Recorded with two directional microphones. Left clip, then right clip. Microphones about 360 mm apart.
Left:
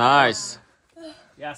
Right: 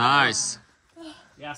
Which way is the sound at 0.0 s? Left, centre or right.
Centre.